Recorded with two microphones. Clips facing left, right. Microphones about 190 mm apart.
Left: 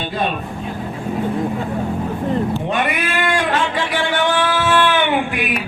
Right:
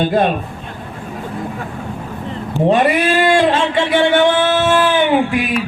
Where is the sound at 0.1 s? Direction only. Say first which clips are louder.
Right 7 dB; 50° right (ahead or behind).